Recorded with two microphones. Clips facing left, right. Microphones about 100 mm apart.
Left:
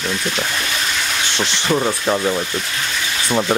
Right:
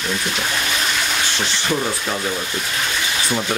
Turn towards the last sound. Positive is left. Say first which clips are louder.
# left 4 dB
turn(degrees=25)  # may be behind; listen again after turning